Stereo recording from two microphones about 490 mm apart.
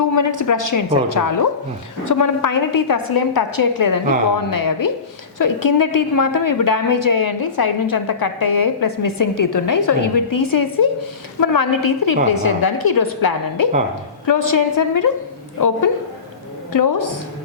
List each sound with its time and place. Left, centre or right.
0.0 s a woman's voice: left
16.7 s a woman's voice: left